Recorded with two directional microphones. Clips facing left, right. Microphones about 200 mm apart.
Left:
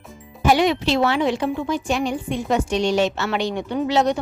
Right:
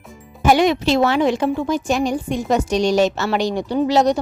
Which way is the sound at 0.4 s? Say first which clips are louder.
Right 3 dB; 45° right (ahead or behind).